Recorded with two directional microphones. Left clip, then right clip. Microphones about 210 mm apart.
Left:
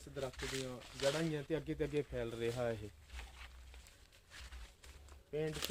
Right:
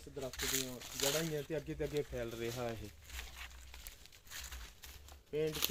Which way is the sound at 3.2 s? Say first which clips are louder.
Right 6 dB; 50° right (ahead or behind).